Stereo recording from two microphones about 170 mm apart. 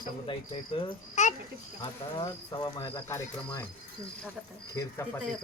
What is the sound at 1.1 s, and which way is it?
Speech, 45° left (ahead or behind).